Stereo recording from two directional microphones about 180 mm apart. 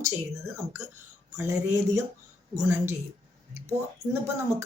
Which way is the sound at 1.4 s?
15° right (ahead or behind).